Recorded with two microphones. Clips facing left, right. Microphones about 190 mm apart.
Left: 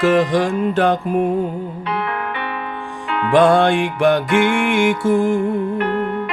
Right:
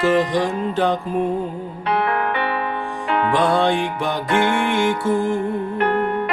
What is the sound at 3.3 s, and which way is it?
Music, 75° left (ahead or behind).